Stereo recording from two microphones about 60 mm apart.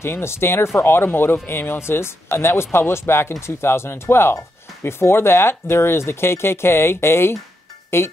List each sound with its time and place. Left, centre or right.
0.0 s speech: left